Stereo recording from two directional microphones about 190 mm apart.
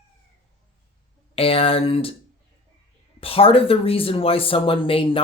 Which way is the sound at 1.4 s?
30° left (ahead or behind).